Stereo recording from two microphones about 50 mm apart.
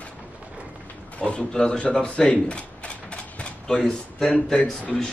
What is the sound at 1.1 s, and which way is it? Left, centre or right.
Speech, left.